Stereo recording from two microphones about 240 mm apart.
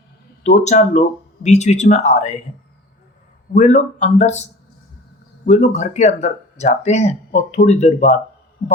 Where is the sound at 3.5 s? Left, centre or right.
Left.